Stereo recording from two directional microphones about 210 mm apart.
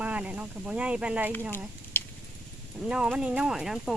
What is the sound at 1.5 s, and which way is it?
Speech, 10° left (ahead or behind).